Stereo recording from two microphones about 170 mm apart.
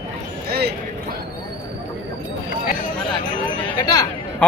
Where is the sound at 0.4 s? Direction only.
65° right (ahead or behind).